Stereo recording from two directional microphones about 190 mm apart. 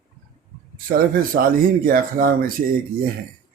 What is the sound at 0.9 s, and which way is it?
Speech, 50° right (ahead or behind).